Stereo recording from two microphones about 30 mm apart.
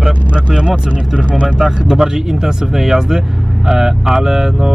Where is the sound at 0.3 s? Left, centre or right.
Right.